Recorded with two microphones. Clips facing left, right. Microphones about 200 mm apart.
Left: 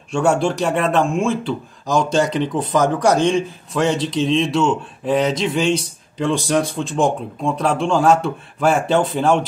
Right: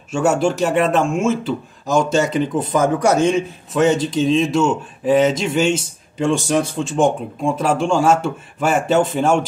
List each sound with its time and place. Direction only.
0.1 s speech: 5° right (ahead or behind)